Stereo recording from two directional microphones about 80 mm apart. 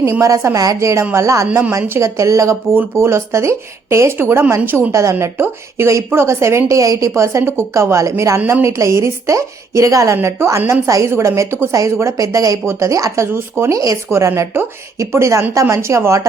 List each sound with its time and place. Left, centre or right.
0.2 s a woman's voice: right